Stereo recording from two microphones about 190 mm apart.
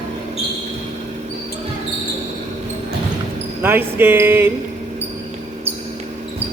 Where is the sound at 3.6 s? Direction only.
10° right (ahead or behind).